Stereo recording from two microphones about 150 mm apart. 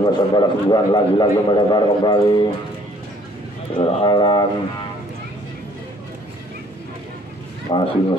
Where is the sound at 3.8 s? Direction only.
35° left (ahead or behind).